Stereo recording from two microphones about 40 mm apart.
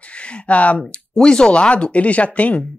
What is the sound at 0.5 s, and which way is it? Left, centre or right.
Speech, left.